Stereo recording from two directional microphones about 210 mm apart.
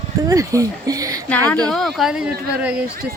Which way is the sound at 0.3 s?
15° right (ahead or behind).